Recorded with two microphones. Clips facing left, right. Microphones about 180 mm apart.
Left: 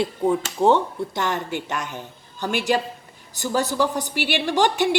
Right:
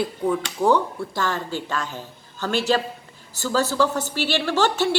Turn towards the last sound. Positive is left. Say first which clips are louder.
# left 1 dB
turn(degrees=15)  # may be behind; listen again after turning